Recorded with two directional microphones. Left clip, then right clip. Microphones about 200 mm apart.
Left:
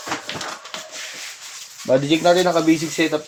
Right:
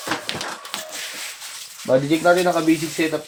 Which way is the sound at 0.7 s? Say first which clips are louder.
Right 2 dB; 60° right (ahead or behind).